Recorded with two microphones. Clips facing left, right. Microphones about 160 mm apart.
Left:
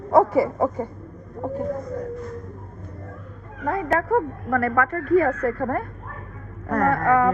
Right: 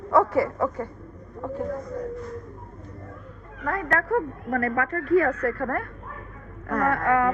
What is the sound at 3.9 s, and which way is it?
A woman's voice, 45° left (ahead or behind).